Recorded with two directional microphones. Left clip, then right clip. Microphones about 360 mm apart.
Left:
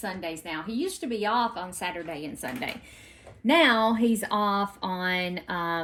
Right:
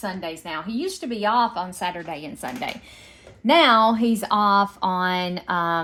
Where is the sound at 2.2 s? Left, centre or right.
Centre.